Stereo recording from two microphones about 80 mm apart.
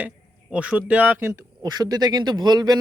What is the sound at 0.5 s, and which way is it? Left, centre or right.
Speech, centre.